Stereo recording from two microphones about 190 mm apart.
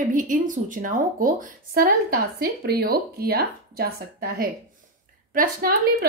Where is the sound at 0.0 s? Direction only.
45° right (ahead or behind).